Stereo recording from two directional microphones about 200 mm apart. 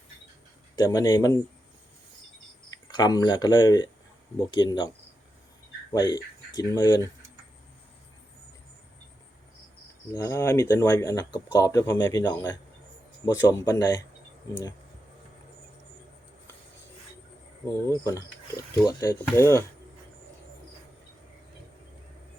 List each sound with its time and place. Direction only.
0.8 s speech: 15° left (ahead or behind)
2.9 s speech: 20° left (ahead or behind)
5.9 s speech: 20° left (ahead or behind)
10.1 s speech: 20° left (ahead or behind)
18.0 s speech: 15° left (ahead or behind)